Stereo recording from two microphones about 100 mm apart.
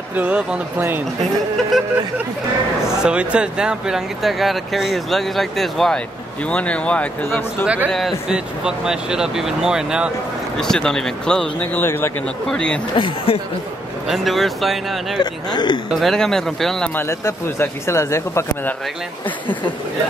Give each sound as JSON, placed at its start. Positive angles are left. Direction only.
{"t": 0.1, "sound": "speech", "side_deg": -10}
{"t": 3.0, "sound": "speech", "side_deg": -10}
{"t": 6.5, "sound": "speech", "side_deg": 10}
{"t": 7.2, "sound": "speech", "side_deg": 25}
{"t": 7.6, "sound": "speech", "side_deg": -15}
{"t": 7.9, "sound": "speech", "side_deg": -5}
{"t": 10.6, "sound": "speech", "side_deg": 5}
{"t": 11.7, "sound": "speech", "side_deg": 20}
{"t": 12.4, "sound": "speech", "side_deg": 10}
{"t": 12.9, "sound": "speech", "side_deg": 60}
{"t": 14.0, "sound": "speech", "side_deg": 0}
{"t": 15.1, "sound": "speech", "side_deg": 50}
{"t": 15.9, "sound": "speech", "side_deg": 0}
{"t": 16.9, "sound": "speech", "side_deg": 25}